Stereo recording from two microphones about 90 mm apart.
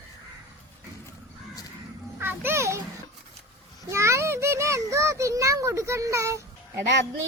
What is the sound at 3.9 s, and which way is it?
A child's voice, 30° right (ahead or behind).